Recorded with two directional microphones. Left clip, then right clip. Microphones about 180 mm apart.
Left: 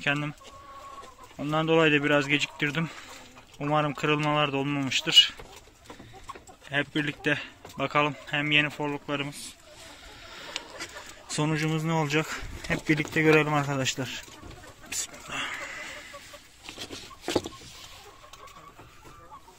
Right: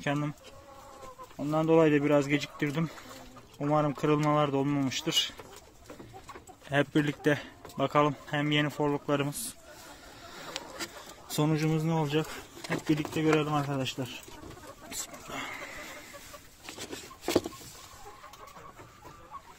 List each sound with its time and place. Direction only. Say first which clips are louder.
0.0 s speech: left 4 dB; 10° right (ahead or behind)
1.5 s speech: left 1 dB; centre (ahead or behind)
6.7 s speech: right 1 dB; 30° right (ahead or behind)
11.2 s speech: left 1 dB; 10° right (ahead or behind)
12.0 s speech: left 3 dB; 15° left (ahead or behind)
14.9 s a sound: left 6 dB; 5° right (ahead or behind)